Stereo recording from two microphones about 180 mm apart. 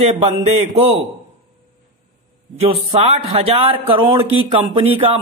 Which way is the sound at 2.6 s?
35° right (ahead or behind).